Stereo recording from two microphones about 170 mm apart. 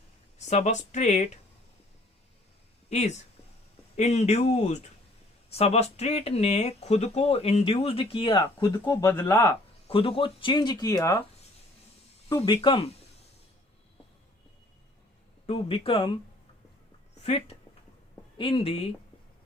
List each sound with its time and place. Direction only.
0.3 s speech: 40° left (ahead or behind)
2.9 s speech: 40° left (ahead or behind); by 9.6 s 15° left (ahead or behind)
9.9 s speech: 30° left (ahead or behind)
12.3 s speech: 30° left (ahead or behind)
15.4 s speech: 35° left (ahead or behind)
17.2 s speech: 35° left (ahead or behind)